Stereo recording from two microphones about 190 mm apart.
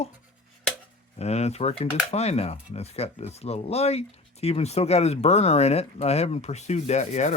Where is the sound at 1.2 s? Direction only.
35° left (ahead or behind).